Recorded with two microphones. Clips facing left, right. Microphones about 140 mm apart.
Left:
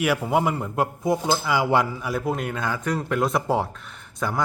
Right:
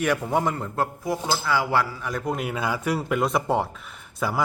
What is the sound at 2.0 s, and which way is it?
Speech, 5° left (ahead or behind).